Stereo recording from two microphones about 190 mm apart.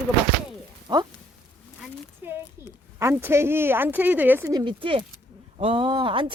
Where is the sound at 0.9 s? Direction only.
20° right (ahead or behind).